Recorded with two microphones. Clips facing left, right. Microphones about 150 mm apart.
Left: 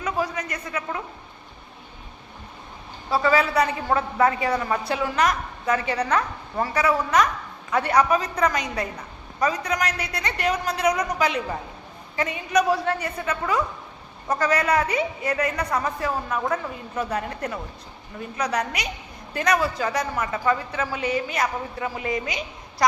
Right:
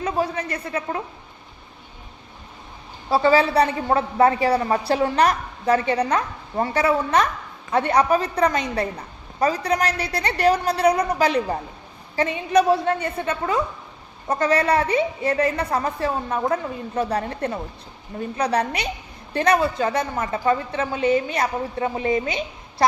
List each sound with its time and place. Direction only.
0.0 s a woman's voice: 30° right (ahead or behind)
3.1 s a woman's voice: 30° right (ahead or behind)